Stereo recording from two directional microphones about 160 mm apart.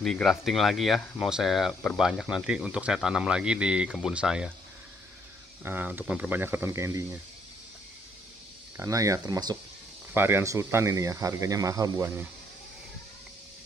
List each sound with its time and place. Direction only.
0.0 s speech: centre (ahead or behind)
5.6 s speech: 10° right (ahead or behind)
8.7 s speech: 20° right (ahead or behind)
10.1 s speech: 15° right (ahead or behind)